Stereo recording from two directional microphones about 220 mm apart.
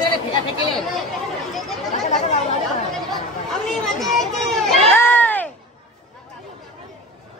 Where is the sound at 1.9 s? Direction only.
30° left (ahead or behind).